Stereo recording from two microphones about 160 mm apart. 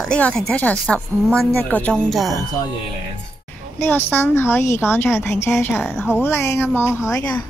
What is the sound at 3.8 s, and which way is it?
A woman's voice, 10° left (ahead or behind).